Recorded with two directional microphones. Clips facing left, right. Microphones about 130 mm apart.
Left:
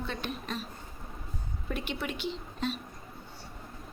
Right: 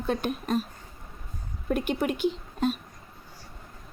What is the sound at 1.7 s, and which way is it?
A woman's voice, 50° right (ahead or behind).